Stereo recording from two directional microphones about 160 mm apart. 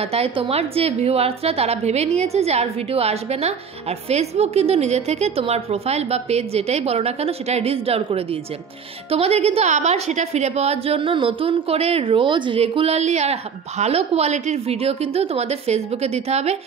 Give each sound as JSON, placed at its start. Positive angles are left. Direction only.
{"t": 0.0, "sound": "a woman's voice", "side_deg": -40}